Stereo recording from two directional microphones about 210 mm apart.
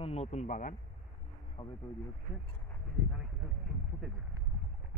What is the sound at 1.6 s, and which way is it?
Speech, 25° left (ahead or behind).